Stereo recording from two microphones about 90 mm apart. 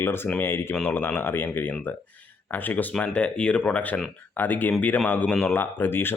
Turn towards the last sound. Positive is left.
turn(degrees=25)  # may be behind; listen again after turning